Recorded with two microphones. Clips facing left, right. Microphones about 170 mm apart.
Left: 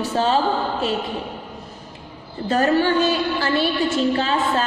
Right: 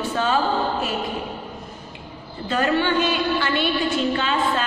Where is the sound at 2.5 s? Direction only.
40° left (ahead or behind).